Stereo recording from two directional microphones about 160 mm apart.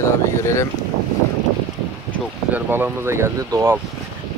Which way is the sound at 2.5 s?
10° right (ahead or behind).